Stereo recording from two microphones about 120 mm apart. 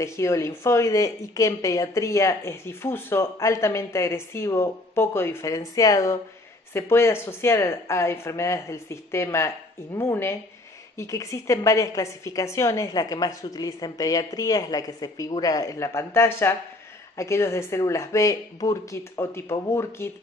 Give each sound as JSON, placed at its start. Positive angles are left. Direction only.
{"t": 0.0, "sound": "speech", "side_deg": 25}